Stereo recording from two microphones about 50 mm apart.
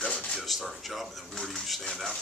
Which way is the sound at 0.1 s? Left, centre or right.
Centre.